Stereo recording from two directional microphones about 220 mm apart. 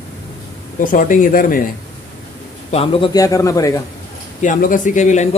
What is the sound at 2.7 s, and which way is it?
A man's voice, 25° left (ahead or behind).